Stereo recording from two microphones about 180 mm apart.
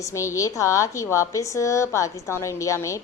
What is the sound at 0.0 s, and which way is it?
Speech, 15° left (ahead or behind).